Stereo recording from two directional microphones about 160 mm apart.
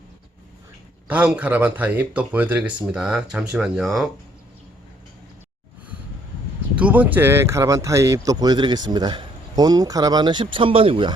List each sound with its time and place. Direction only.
1.0 s speech: 10° right (ahead or behind)
6.7 s speech: 10° right (ahead or behind); by 11.1 s 35° right (ahead or behind)